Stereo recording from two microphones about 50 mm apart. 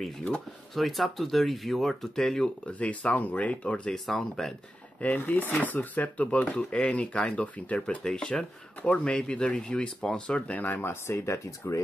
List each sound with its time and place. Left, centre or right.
0.7 s speech: centre
2.6 s speech: left
3.9 s speech: centre
5.2 s speech: left; by 8.5 s centre
8.8 s speech: left
10.5 s speech: left
10.8 s speech: left